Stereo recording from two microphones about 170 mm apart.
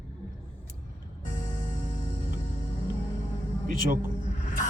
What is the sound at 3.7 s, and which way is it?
Speech, 55° right (ahead or behind).